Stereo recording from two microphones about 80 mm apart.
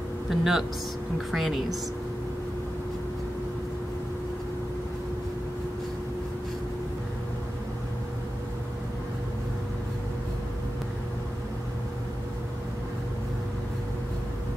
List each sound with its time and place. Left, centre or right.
0.3 s speech: centre